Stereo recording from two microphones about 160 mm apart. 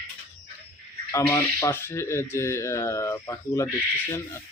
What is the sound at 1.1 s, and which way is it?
Speech, 15° left (ahead or behind).